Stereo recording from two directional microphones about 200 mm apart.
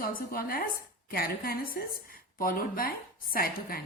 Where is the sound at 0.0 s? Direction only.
45° left (ahead or behind).